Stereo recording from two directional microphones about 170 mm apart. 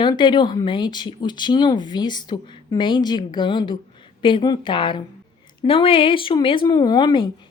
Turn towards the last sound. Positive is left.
turn(degrees=25)  # may be behind; listen again after turning